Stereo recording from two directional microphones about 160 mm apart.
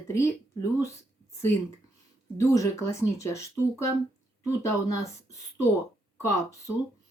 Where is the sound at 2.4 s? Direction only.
20° left (ahead or behind).